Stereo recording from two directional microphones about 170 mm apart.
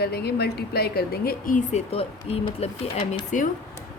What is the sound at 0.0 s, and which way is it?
A woman's voice, 70° left (ahead or behind).